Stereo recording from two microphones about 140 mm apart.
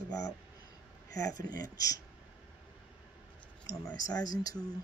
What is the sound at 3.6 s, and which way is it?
Speech, 25° left (ahead or behind).